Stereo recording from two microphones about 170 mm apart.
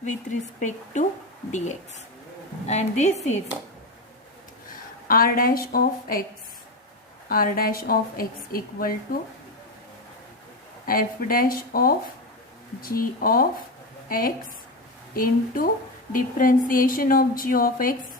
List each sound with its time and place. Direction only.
0.0 s speech: 45° left (ahead or behind)
2.6 s a woman's voice: 40° left (ahead or behind)
5.0 s speech: 60° left (ahead or behind)
7.3 s speech: 55° left (ahead or behind)
10.8 s speech: 55° left (ahead or behind)